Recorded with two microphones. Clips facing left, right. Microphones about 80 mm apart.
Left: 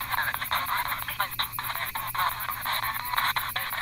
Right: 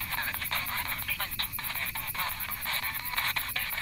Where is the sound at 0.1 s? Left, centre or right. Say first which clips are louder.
Left 7 dB; left.